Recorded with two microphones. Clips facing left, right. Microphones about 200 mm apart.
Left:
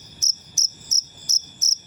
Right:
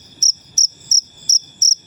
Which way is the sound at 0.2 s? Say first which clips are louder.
Right 3 dB; 15° left (ahead or behind).